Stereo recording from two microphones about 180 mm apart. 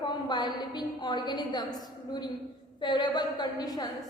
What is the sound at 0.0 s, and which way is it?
A woman's voice, 25° left (ahead or behind).